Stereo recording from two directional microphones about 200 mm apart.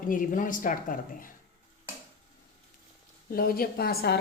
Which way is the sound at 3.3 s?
50° left (ahead or behind).